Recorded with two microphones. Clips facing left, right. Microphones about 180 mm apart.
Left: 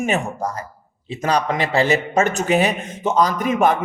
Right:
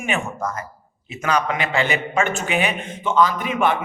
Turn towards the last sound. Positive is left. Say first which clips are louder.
# left 3 dB
turn(degrees=40)  # may be behind; listen again after turning